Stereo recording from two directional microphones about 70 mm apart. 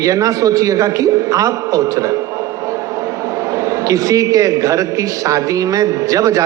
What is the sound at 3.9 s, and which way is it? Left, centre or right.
A man's voice, right.